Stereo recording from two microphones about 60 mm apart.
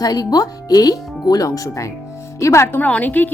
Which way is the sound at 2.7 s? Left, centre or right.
Left.